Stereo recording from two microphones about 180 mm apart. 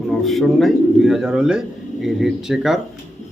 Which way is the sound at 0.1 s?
Centre (ahead or behind).